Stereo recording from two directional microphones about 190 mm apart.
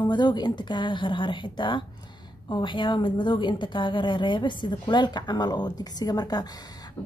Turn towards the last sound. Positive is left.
turn(degrees=20)  # may be behind; listen again after turning